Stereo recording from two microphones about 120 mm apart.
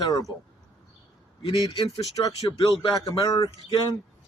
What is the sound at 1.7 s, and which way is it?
Speech, 45° left (ahead or behind).